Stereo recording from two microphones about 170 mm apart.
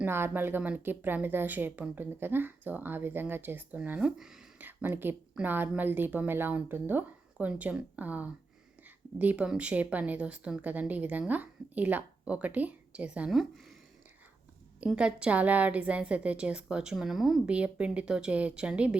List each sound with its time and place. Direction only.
0.0 s speech: 10° right (ahead or behind)
14.8 s speech: 5° right (ahead or behind)